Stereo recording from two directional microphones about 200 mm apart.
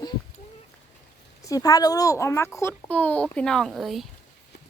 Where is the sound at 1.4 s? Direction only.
15° left (ahead or behind); by 4.0 s centre (ahead or behind).